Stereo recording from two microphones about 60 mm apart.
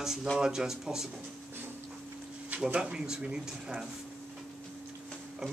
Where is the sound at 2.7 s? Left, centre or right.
Centre.